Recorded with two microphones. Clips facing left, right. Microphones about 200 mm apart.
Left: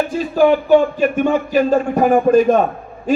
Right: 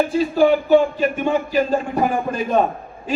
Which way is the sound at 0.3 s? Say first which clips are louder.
Left 3 dB; 50° left (ahead or behind).